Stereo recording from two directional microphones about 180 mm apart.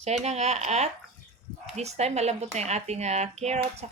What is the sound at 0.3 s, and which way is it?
Speech, 35° right (ahead or behind).